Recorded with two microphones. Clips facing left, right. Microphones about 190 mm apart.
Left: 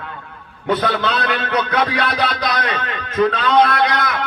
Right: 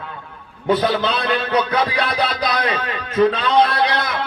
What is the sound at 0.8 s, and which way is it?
A man's voice, 30° right (ahead or behind).